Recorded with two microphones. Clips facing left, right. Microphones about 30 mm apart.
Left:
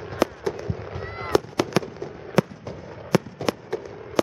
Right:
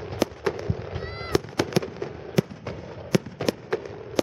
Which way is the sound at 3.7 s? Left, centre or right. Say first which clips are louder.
Right 1 dB; right.